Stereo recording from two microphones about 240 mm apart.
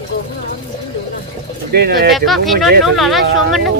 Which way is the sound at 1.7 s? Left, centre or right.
Right.